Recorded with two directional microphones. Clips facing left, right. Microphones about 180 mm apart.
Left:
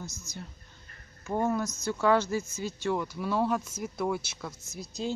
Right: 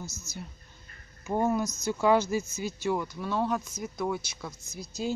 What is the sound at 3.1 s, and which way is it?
Speech, 5° left (ahead or behind).